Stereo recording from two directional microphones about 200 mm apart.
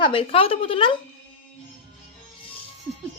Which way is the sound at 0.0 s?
25° left (ahead or behind).